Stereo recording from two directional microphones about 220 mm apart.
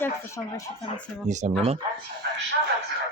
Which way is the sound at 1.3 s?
30° right (ahead or behind).